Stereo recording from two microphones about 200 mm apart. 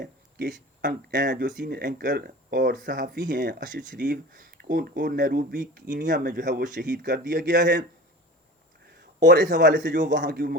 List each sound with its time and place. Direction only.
0.0 s speech: 50° right (ahead or behind)
9.2 s speech: 60° right (ahead or behind)